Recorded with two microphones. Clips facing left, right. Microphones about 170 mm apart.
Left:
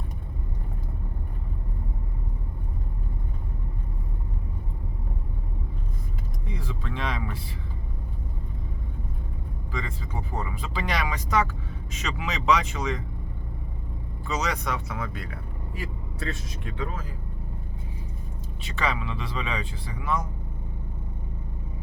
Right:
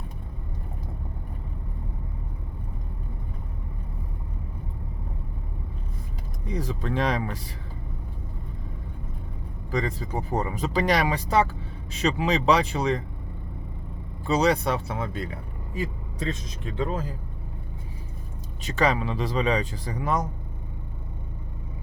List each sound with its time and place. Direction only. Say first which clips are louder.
6.5 s a sound: right 7 dB; 40° right (ahead or behind)
9.7 s speech: right 7 dB; 40° right (ahead or behind)
14.3 s speech: right 7 dB; 30° right (ahead or behind)
18.6 s speech: right 6 dB; 40° right (ahead or behind)